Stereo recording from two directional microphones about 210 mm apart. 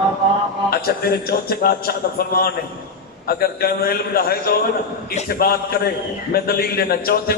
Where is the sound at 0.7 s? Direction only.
45° left (ahead or behind).